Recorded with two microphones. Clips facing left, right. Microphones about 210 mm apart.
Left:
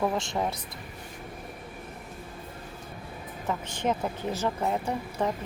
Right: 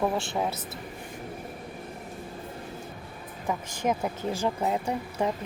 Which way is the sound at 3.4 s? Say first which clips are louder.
Right 1 dB; 10° right (ahead or behind).